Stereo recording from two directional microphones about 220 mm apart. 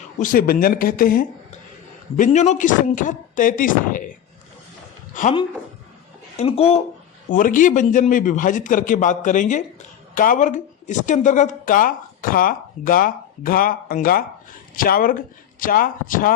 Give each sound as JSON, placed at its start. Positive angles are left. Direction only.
{"t": 0.2, "sound": "speech", "side_deg": 40}
{"t": 5.2, "sound": "speech", "side_deg": 35}
{"t": 6.3, "sound": "speech", "side_deg": 25}
{"t": 7.3, "sound": "speech", "side_deg": 35}